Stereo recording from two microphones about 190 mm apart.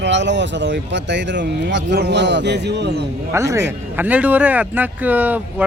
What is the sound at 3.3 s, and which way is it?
Speech, 15° right (ahead or behind).